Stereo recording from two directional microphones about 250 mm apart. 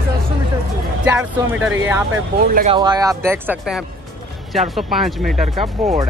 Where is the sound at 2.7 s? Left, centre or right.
Centre.